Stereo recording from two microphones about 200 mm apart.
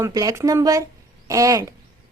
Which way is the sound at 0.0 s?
15° right (ahead or behind).